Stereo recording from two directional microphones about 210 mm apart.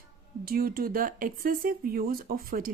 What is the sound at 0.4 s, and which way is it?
A woman's voice, 45° right (ahead or behind).